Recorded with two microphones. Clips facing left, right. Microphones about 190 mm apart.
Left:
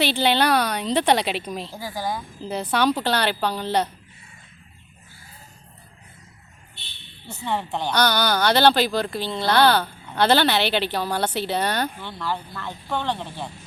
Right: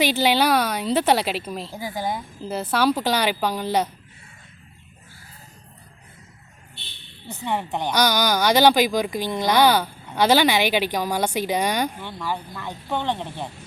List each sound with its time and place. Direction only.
0.0 s speech: 10° right (ahead or behind)
1.7 s speech: 20° right (ahead or behind)
2.4 s speech: 5° right (ahead or behind)
7.3 s speech: 15° right (ahead or behind)